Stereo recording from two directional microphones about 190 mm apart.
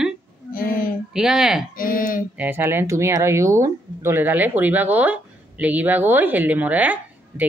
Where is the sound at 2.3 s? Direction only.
10° right (ahead or behind).